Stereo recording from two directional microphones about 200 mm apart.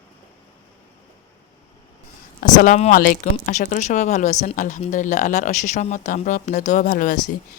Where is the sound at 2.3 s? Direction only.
40° left (ahead or behind).